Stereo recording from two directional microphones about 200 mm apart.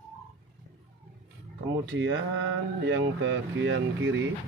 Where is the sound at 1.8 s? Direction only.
70° right (ahead or behind).